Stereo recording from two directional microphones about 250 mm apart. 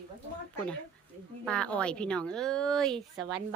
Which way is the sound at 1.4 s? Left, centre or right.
Centre.